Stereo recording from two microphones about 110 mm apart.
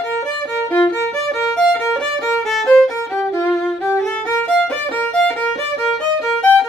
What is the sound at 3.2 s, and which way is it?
Violin, 25° left (ahead or behind).